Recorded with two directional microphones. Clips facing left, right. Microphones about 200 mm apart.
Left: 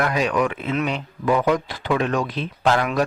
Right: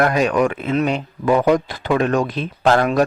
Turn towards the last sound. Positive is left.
turn(degrees=-45)  # may be behind; listen again after turning